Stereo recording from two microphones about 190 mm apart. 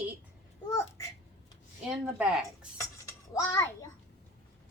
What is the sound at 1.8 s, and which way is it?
Speech, 5° right (ahead or behind).